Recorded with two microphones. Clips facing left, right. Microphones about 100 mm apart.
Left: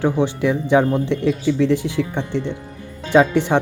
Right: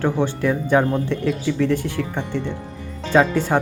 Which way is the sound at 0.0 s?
15° left (ahead or behind).